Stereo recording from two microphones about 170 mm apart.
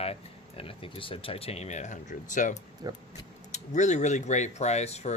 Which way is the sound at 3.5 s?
45° left (ahead or behind).